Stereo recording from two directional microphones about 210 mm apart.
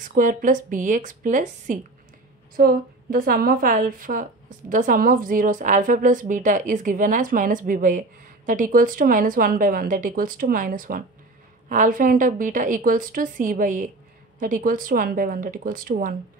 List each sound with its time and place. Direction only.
0.0 s a woman's voice: 40° right (ahead or behind)